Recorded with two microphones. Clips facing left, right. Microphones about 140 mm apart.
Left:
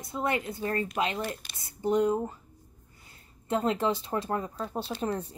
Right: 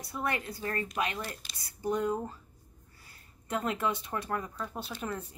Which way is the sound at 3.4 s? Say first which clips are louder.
Left 5 dB; 30° left (ahead or behind).